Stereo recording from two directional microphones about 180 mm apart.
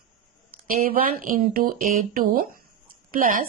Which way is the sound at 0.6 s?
50° right (ahead or behind).